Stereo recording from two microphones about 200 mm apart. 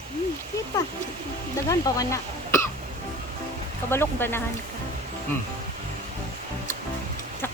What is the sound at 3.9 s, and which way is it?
Speech, 10° left (ahead or behind).